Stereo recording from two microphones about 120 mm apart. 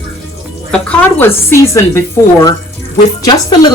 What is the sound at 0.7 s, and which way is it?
A woman's voice, 10° left (ahead or behind).